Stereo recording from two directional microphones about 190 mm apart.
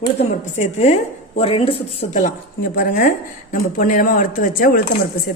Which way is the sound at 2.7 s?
45° left (ahead or behind).